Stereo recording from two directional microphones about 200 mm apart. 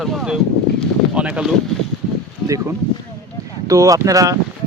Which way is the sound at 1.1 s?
5° right (ahead or behind).